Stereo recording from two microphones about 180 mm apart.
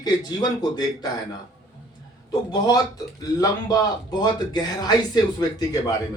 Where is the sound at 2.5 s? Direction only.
20° left (ahead or behind).